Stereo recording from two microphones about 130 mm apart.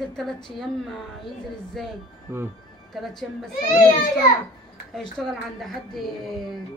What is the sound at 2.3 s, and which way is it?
Speech, 20° right (ahead or behind).